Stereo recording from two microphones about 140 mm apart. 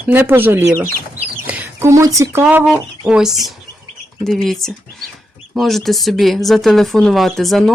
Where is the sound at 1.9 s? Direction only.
25° right (ahead or behind).